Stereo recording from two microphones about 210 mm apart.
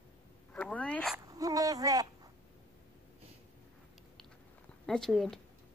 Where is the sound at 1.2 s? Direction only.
15° right (ahead or behind).